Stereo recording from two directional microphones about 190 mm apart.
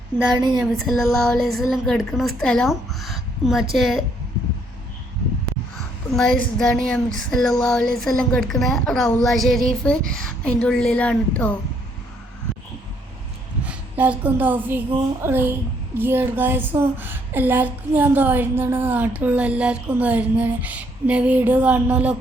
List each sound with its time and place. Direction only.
0.3 s speech: 20° right (ahead or behind)
0.6 s speech: centre (ahead or behind)
6.1 s speech: 5° left (ahead or behind)
13.7 s a woman's voice: 10° right (ahead or behind)